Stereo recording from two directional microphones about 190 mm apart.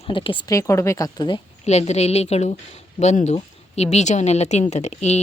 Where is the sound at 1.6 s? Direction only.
35° left (ahead or behind).